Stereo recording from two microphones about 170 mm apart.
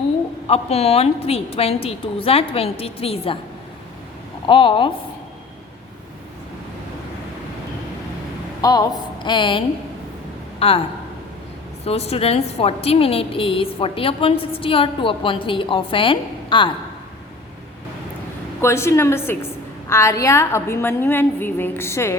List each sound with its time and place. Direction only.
0.4 s a woman's voice: 35° left (ahead or behind)
4.4 s a woman's voice: 30° left (ahead or behind)
8.6 s a woman's voice: 20° left (ahead or behind)
11.9 s a woman's voice: 35° left (ahead or behind)
18.6 s a woman's voice: 15° left (ahead or behind)